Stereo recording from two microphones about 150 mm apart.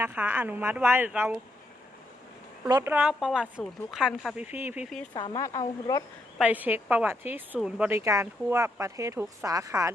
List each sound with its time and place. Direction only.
0.0 s a woman's voice: 10° right (ahead or behind)
2.6 s speech: 25° right (ahead or behind)
2.9 s speech: 5° right (ahead or behind)
4.4 s a woman's voice: 10° right (ahead or behind)
5.1 s speech: 30° left (ahead or behind)
6.4 s a woman's voice: 10° right (ahead or behind)